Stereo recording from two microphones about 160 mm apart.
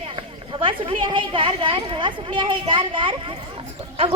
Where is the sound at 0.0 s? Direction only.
35° right (ahead or behind).